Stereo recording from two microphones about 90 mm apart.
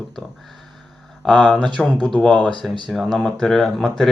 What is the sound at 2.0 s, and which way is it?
Speech, 10° left (ahead or behind).